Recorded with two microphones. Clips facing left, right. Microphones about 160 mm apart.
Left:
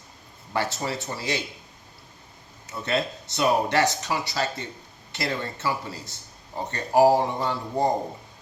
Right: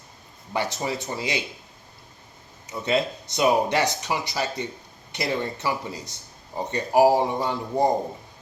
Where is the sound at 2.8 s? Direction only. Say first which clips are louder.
Right 3 dB; 15° right (ahead or behind).